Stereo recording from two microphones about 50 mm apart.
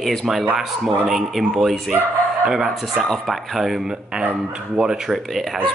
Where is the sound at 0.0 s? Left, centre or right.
Centre.